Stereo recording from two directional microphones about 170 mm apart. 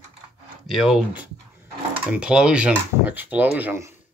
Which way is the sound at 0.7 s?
Centre (ahead or behind).